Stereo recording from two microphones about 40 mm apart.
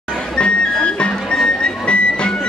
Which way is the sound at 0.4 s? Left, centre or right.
Left.